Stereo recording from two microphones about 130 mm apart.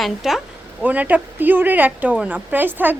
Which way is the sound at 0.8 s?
10° right (ahead or behind).